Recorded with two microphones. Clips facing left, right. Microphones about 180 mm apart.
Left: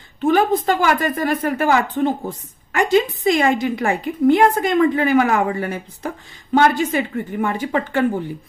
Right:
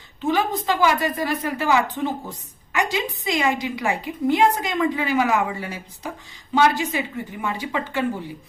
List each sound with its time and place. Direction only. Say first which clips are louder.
0.2 s a woman's voice: left 6 dB; 50° left (ahead or behind)